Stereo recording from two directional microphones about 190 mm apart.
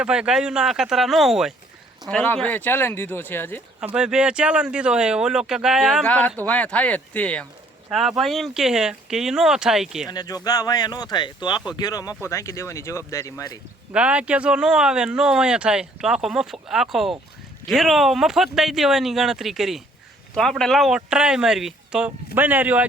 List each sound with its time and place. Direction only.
0.0 s speech: 5° right (ahead or behind); by 3.6 s 10° left (ahead or behind)
3.8 s speech: 5° right (ahead or behind)
6.1 s speech: 5° left (ahead or behind)
10.1 s speech: 20° left (ahead or behind)
13.9 s speech: 5° right (ahead or behind)